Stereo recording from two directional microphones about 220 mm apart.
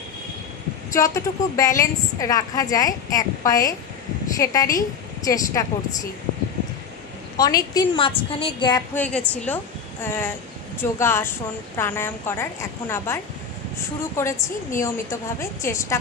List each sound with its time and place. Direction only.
0.9 s a woman's voice: 15° left (ahead or behind)
7.3 s a woman's voice: 15° left (ahead or behind)
8.9 s a woman's voice: 5° left (ahead or behind)